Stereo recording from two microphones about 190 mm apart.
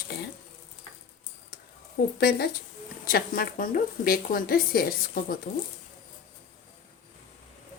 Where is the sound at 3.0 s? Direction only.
50° left (ahead or behind).